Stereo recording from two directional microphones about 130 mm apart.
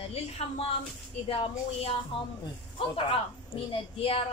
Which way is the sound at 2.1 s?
45° left (ahead or behind).